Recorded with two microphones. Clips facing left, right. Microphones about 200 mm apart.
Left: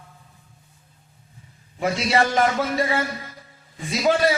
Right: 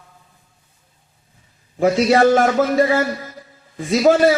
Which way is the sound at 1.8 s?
45° right (ahead or behind).